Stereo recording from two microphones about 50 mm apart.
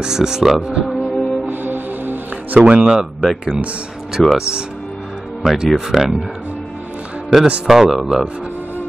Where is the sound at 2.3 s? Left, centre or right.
Right.